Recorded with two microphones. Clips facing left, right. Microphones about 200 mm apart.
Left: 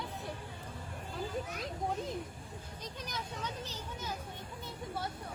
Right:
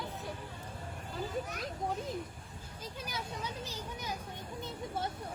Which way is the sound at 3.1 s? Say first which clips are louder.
Right 1 dB; 10° right (ahead or behind).